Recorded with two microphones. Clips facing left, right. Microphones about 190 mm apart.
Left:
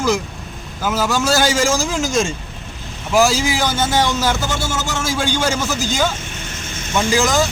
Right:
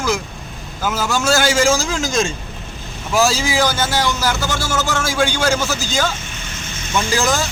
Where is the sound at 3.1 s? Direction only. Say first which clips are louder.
Left 1 dB; 15° left (ahead or behind).